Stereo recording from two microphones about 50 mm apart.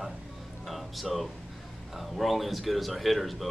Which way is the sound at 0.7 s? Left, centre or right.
Centre.